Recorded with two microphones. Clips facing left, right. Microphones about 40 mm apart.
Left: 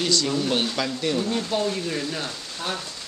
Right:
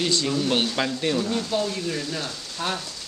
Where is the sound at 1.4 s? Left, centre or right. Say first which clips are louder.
Left 1 dB; centre.